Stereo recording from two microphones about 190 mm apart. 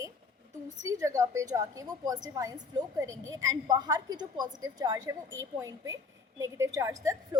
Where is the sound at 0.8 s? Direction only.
15° right (ahead or behind).